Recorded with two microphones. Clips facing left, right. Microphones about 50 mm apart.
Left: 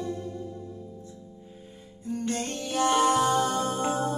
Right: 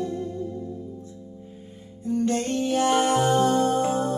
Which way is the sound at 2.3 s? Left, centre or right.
Right.